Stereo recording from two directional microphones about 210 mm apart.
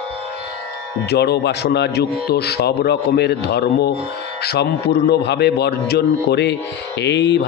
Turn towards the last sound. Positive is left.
turn(degrees=55)  # may be behind; listen again after turning